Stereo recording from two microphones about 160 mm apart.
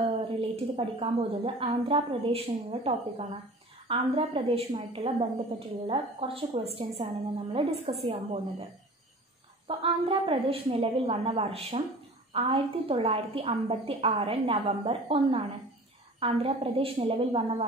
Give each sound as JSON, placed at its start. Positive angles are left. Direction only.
{"t": 0.0, "sound": "a woman's voice", "side_deg": -35}
{"t": 9.7, "sound": "a woman's voice", "side_deg": -35}
{"t": 16.2, "sound": "a woman's voice", "side_deg": -35}